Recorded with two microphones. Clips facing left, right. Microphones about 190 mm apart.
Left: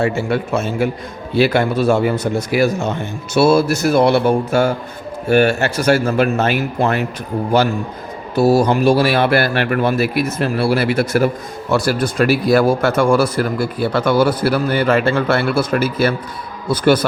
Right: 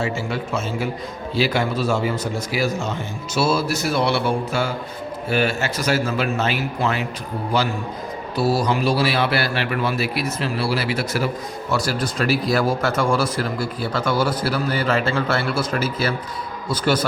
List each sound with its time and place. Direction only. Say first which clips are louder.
0.0 s speech: left 7 dB; 60° left (ahead or behind)
8.4 s a man's voice: left 7 dB; 45° left (ahead or behind)